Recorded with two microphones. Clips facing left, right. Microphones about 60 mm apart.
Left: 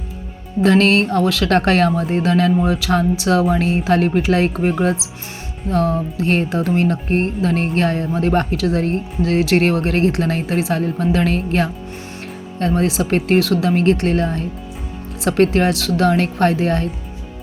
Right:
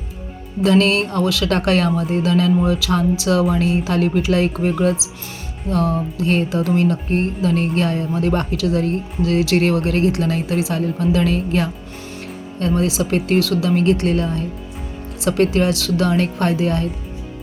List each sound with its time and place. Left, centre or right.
0.6 s speech: left